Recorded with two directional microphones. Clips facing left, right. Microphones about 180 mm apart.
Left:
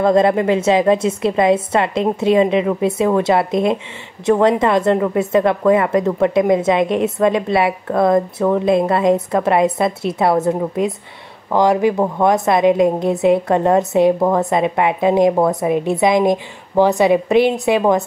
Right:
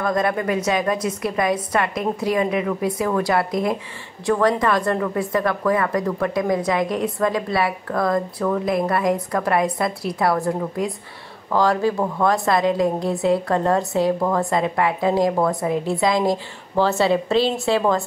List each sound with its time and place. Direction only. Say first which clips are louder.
0.0 s a woman's voice: left 8 dB; 25° left (ahead or behind)